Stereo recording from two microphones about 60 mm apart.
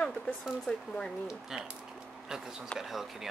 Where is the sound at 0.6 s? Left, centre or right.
Centre.